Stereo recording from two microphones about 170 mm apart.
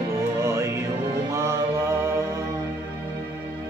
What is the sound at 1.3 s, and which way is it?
Mantra, 15° right (ahead or behind).